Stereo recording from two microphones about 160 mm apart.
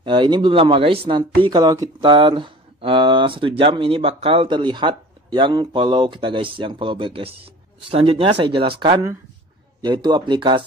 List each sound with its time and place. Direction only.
0.0 s speech: 30° right (ahead or behind)